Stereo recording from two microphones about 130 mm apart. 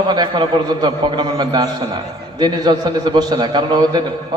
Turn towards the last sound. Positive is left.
turn(degrees=-35)  # may be behind; listen again after turning